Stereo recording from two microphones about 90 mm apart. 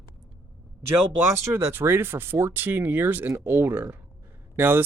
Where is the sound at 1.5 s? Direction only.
30° right (ahead or behind).